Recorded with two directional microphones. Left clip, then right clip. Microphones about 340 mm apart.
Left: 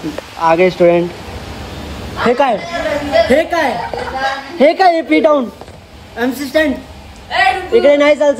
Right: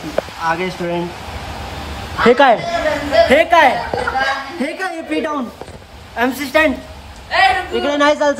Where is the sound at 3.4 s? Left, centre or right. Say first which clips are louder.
Right 4 dB; right.